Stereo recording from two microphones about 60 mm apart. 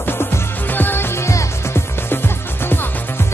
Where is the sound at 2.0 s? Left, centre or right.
Left.